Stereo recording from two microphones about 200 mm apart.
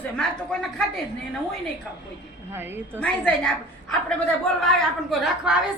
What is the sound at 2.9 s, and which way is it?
Speech, 5° left (ahead or behind).